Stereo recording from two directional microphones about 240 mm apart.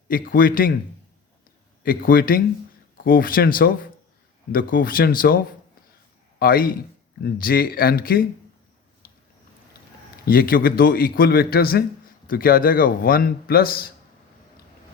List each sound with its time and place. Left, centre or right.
0.1 s a man's voice: left
1.8 s a man's voice: left
6.4 s a man's voice: left
10.2 s a man's voice: left